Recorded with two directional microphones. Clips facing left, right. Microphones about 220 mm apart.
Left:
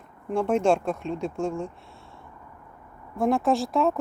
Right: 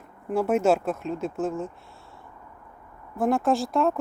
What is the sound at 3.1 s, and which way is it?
Speech, centre (ahead or behind).